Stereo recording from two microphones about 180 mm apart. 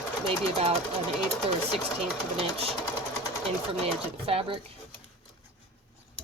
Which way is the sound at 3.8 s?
30° right (ahead or behind).